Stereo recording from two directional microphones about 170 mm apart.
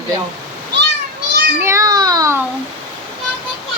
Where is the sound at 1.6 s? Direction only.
20° right (ahead or behind).